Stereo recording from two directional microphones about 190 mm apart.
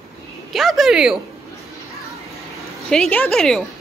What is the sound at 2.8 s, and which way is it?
Speech, 5° left (ahead or behind).